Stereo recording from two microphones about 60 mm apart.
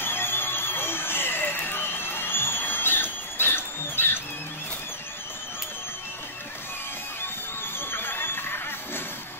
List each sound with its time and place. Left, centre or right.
0.0 s music: left
7.9 s music: left